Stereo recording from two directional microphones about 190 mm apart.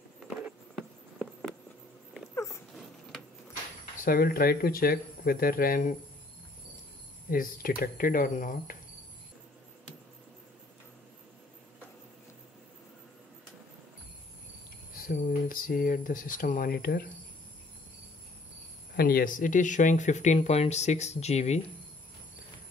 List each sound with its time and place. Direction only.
2.3 s dog: 15° left (ahead or behind)
4.0 s speech: 50° left (ahead or behind)
7.2 s speech: 45° left (ahead or behind)
15.0 s speech: 45° left (ahead or behind)
18.9 s speech: 50° left (ahead or behind); by 21.5 s 35° left (ahead or behind)